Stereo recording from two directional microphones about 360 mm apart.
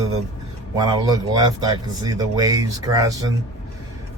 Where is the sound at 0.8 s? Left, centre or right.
Centre.